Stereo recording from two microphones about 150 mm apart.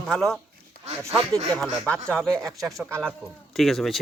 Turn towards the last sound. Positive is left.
turn(degrees=0)  # may be behind; listen again after turning